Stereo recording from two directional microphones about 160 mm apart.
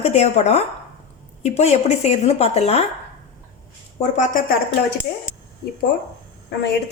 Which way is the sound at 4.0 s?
50° left (ahead or behind).